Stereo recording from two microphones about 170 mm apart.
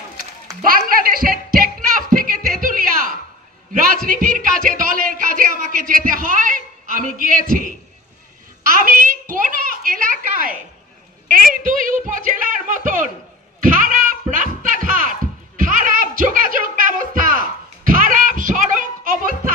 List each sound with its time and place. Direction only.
0.7 s music: 60° right (ahead or behind)
2.6 s a sound: 55° right (ahead or behind)
3.9 s a man's voice: 55° right (ahead or behind)
8.7 s a child's voice: 55° right (ahead or behind)
13.6 s music: 50° right (ahead or behind)